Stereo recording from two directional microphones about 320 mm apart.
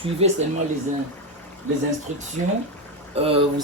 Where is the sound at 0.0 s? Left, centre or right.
Centre.